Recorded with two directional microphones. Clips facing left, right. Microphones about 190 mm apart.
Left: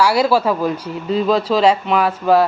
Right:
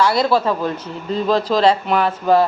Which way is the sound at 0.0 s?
10° left (ahead or behind).